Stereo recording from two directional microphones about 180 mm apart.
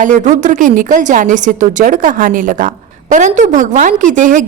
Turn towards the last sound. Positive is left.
turn(degrees=-45)  # may be behind; listen again after turning